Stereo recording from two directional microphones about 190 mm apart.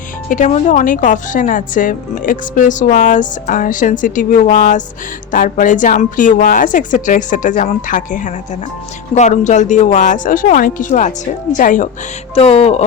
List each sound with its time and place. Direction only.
0.3 s a woman's voice: 40° left (ahead or behind)
12.3 s a woman's voice: 30° left (ahead or behind)